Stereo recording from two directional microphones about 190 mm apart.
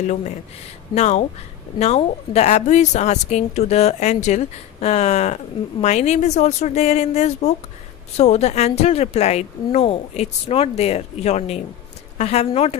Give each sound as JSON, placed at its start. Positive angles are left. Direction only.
{"t": 0.0, "sound": "a woman's voice", "side_deg": 40}